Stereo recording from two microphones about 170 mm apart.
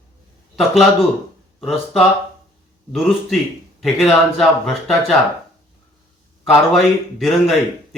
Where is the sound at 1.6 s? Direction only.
Centre (ahead or behind).